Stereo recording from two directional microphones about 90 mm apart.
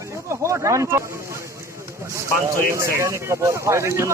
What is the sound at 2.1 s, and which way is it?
Speech, 35° right (ahead or behind).